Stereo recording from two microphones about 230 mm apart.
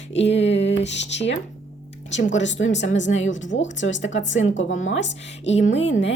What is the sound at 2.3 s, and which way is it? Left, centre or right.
Music, left.